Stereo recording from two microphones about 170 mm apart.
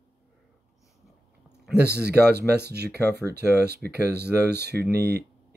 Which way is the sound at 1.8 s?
75° right (ahead or behind).